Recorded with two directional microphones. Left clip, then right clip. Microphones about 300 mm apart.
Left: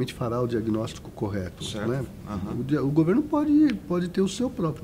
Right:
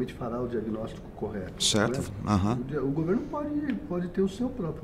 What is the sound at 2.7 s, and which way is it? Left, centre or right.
Speech, left.